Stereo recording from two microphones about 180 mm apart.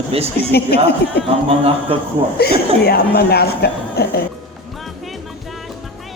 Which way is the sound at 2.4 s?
60° left (ahead or behind).